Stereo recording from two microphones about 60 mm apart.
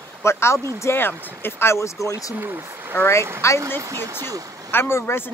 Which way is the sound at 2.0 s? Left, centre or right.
Left.